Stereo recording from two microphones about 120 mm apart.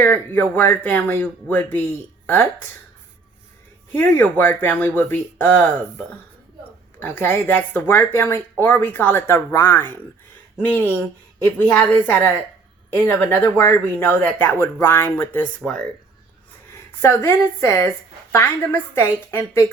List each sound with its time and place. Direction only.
0.0 s speech: 15° left (ahead or behind)
3.9 s speech: 15° left (ahead or behind)
7.0 s speech: 15° left (ahead or behind)
17.0 s a woman's voice: 20° left (ahead or behind)